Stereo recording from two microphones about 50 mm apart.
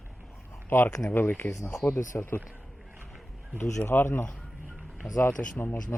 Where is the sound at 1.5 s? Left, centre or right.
Left.